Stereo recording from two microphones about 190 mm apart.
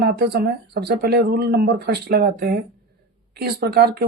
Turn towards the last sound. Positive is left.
turn(degrees=-55)  # may be behind; listen again after turning